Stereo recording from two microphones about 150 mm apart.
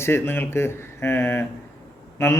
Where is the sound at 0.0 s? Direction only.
15° left (ahead or behind).